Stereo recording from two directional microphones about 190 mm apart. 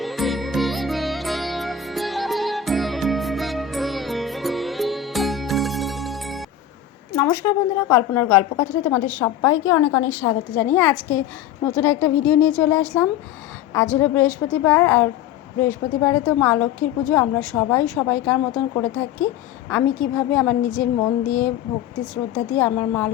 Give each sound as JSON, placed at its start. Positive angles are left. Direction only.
{"t": 0.0, "sound": "music", "side_deg": 0}
{"t": 7.2, "sound": "a woman's voice", "side_deg": 15}